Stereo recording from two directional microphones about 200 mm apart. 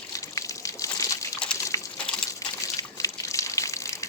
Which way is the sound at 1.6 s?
15° left (ahead or behind).